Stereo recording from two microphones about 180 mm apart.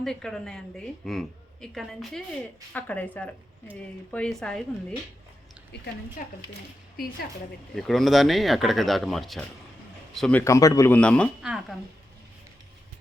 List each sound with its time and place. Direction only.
0.0 s a woman's voice: 5° left (ahead or behind)
6.2 s speech: 50° left (ahead or behind)
7.8 s a woman's voice: centre (ahead or behind)
10.4 s a woman's voice: 15° left (ahead or behind); by 11.8 s centre (ahead or behind)